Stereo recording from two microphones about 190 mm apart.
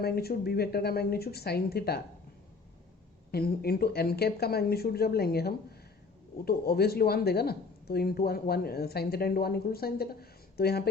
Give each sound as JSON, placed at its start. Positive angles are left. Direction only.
{"t": 0.0, "sound": "speech", "side_deg": 55}
{"t": 3.3, "sound": "speech", "side_deg": 55}